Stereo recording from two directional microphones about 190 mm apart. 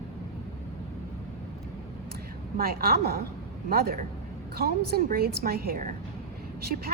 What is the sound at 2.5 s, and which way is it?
A woman's voice, 50° right (ahead or behind).